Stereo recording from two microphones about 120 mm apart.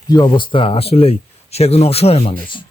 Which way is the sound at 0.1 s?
40° left (ahead or behind).